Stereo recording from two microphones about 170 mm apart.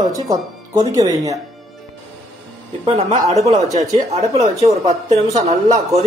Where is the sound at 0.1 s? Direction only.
20° right (ahead or behind).